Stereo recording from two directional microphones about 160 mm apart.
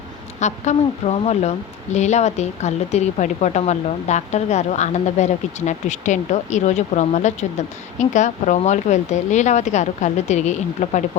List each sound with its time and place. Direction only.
0.3 s speech: 45° left (ahead or behind)